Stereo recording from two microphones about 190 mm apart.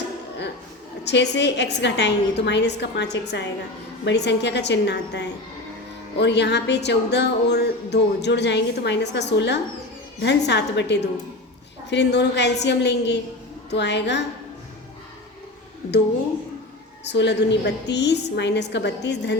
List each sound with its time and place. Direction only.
1.0 s speech: 65° left (ahead or behind)
17.0 s speech: 65° left (ahead or behind)